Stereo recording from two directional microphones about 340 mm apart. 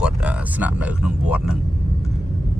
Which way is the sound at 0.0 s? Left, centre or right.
Centre.